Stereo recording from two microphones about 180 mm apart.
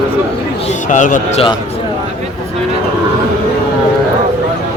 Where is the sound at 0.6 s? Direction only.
45° left (ahead or behind).